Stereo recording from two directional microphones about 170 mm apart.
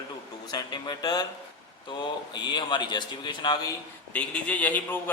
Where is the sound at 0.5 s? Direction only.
25° left (ahead or behind).